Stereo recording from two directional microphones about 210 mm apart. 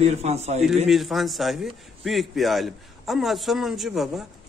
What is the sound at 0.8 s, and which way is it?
A man's voice, centre (ahead or behind).